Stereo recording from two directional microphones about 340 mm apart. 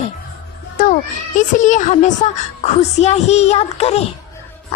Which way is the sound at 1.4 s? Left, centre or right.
Left.